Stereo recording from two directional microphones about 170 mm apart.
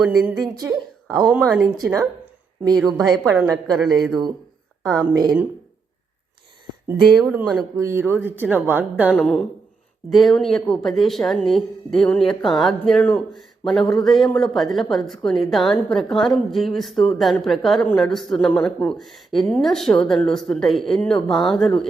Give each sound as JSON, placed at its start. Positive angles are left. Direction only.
{"t": 0.0, "sound": "speech", "side_deg": 0}
{"t": 2.0, "sound": "a sound", "side_deg": -20}
{"t": 2.7, "sound": "speech", "side_deg": 0}
{"t": 4.8, "sound": "a woman's voice", "side_deg": -20}
{"t": 7.2, "sound": "speech", "side_deg": -5}
{"t": 9.1, "sound": "speech", "side_deg": 5}